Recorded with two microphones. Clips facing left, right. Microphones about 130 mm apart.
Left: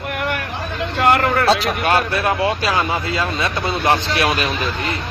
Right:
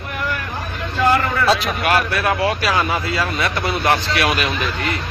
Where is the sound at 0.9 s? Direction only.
70° left (ahead or behind).